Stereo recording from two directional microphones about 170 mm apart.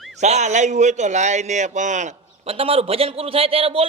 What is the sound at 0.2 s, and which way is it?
A man's voice, 40° right (ahead or behind).